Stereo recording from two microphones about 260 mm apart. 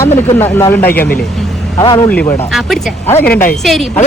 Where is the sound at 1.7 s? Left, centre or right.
Centre.